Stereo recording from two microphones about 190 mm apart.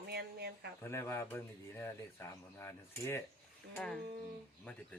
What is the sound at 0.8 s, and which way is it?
Speech, 10° left (ahead or behind).